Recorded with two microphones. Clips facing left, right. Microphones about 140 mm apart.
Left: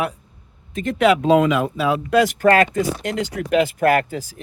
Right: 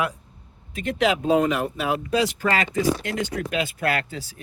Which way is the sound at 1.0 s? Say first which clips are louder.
Left 5 dB; 80° left.